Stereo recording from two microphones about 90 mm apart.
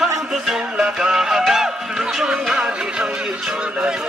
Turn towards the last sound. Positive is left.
turn(degrees=-5)  # may be behind; listen again after turning